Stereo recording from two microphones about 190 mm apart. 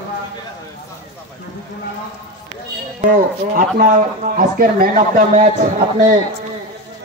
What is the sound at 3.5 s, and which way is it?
A man's voice, 45° right (ahead or behind).